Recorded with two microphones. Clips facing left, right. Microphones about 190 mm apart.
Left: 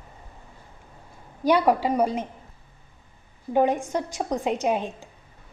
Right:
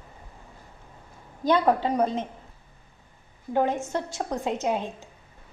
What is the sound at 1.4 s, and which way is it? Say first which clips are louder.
Speech: left 2 dB; 10° left (ahead or behind).